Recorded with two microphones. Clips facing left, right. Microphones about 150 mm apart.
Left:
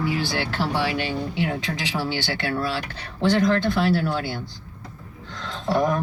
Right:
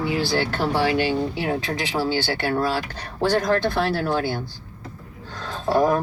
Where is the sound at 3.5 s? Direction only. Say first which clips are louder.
Left 1 dB; 40° right (ahead or behind).